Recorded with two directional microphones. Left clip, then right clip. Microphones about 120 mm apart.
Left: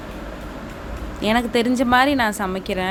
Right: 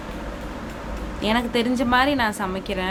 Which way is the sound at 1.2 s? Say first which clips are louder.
Left 3 dB; 45° left (ahead or behind).